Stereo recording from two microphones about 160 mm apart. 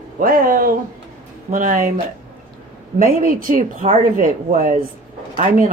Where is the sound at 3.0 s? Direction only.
60° right (ahead or behind).